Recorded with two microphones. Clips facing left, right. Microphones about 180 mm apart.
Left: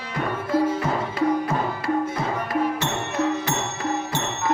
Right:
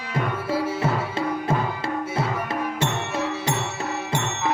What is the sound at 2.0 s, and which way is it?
Music, 5° right (ahead or behind).